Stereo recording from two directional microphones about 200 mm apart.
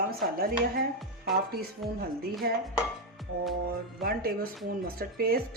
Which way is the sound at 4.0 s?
50° right (ahead or behind).